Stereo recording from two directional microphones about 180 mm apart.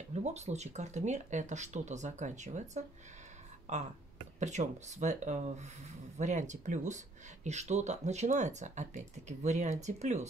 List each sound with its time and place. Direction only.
0.1 s speech: 40° right (ahead or behind)
3.7 s a sound: 40° right (ahead or behind)
4.4 s speech: 40° right (ahead or behind)